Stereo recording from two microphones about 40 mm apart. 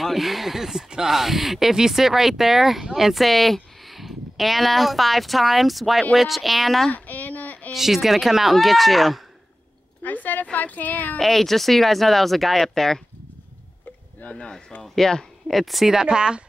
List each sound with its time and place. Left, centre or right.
0.0 s speech: centre
6.9 s a sound: left
7.7 s speech: centre
10.0 s speech: left
11.1 s speech: centre
14.3 s speech: left
14.8 s speech: centre
15.4 s speech: centre; by 16.4 s right